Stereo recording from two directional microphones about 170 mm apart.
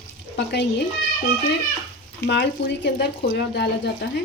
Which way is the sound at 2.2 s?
90° left.